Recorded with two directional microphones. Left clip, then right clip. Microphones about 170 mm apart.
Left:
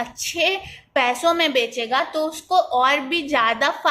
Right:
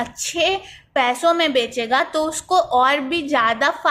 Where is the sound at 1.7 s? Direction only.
25° right (ahead or behind).